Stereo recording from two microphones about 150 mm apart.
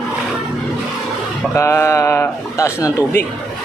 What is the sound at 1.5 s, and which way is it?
A man's voice, 20° left (ahead or behind).